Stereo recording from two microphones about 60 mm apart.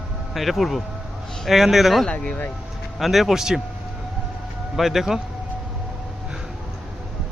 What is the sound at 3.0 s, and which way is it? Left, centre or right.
Speech, centre.